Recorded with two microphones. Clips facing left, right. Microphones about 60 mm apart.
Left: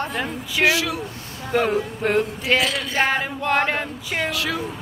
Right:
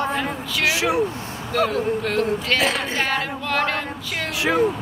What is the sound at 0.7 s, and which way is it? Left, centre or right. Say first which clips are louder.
Speech: right 1 dB; right.